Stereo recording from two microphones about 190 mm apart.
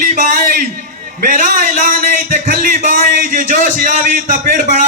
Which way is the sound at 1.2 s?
45° right (ahead or behind).